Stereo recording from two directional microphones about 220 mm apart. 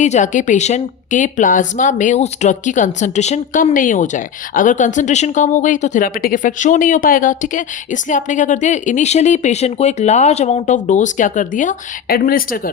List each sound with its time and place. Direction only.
0.0 s a woman's voice: 35° left (ahead or behind)